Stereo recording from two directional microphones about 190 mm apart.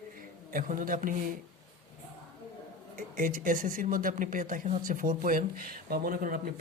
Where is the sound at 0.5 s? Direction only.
45° right (ahead or behind).